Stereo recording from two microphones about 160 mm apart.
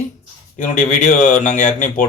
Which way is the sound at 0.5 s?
50° left (ahead or behind).